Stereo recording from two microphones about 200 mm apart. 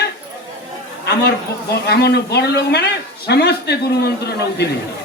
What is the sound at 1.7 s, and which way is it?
A man's voice, 55° left (ahead or behind).